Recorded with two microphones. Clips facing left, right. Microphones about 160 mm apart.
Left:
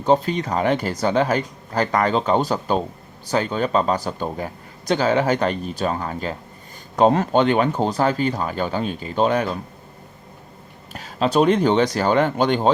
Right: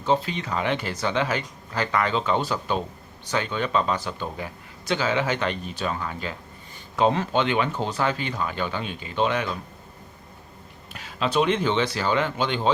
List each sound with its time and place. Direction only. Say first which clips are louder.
0.0 s speech: left 6 dB; 45° left (ahead or behind)
10.9 s speech: left 5 dB; 40° left (ahead or behind)